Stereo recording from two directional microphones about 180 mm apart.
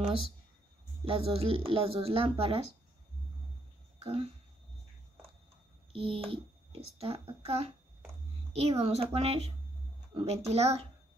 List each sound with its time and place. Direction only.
1.0 s speech: 30° right (ahead or behind)
4.0 s speech: 35° right (ahead or behind)
5.9 s speech: 30° right (ahead or behind)